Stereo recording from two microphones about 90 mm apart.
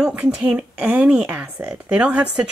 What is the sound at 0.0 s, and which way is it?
A woman's voice, 10° right (ahead or behind).